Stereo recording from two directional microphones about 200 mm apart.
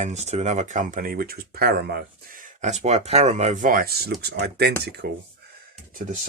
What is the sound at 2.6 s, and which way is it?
Speech, 35° right (ahead or behind).